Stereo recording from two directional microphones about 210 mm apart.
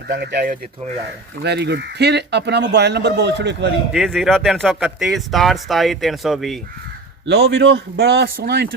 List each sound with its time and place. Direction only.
0.1 s speech: 50° right (ahead or behind)
3.9 s speech: centre (ahead or behind)
7.3 s speech: 55° right (ahead or behind)